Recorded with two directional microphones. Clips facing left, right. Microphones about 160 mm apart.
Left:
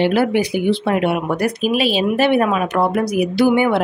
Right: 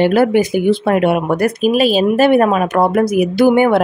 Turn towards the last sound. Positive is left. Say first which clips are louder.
# right 4 dB
turn(degrees=-50)  # may be behind; listen again after turning